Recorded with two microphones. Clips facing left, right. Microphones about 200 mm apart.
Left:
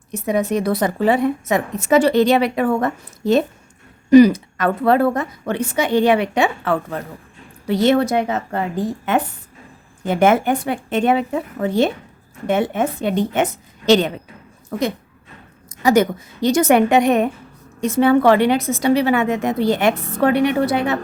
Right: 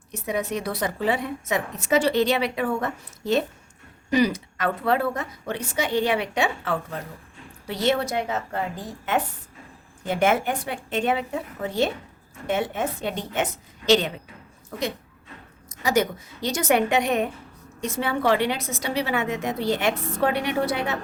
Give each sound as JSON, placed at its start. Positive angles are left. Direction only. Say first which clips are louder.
{"t": 0.1, "sound": "a woman's voice", "louder": "left 8 dB", "side_deg": 45}
{"t": 10.0, "sound": "a woman's voice", "louder": "left 6 dB", "side_deg": 55}
{"t": 15.8, "sound": "a woman's voice", "louder": "left 7 dB", "side_deg": 55}